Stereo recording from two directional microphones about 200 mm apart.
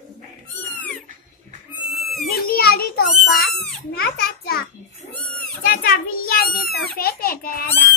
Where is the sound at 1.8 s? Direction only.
Centre (ahead or behind).